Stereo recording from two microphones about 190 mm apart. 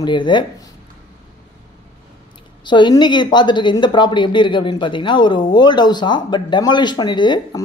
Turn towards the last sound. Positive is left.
turn(degrees=25)  # may be behind; listen again after turning